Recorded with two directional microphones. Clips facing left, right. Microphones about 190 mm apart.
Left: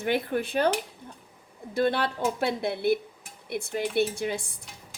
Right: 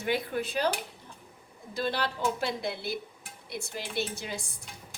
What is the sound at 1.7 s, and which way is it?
Speech, 55° left (ahead or behind).